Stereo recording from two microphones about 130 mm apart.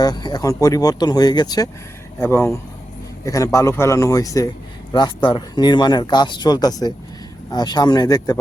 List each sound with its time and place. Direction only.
0.0 s speech: 30° left (ahead or behind)
2.1 s speech: 20° left (ahead or behind)